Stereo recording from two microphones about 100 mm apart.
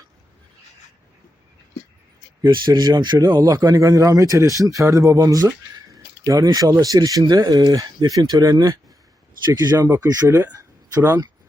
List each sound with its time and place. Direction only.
2.5 s speech: 50° right (ahead or behind)
9.7 s speech: 30° right (ahead or behind)